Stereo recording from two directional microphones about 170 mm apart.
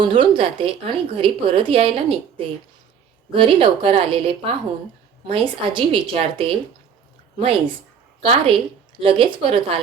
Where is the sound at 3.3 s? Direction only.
30° right (ahead or behind).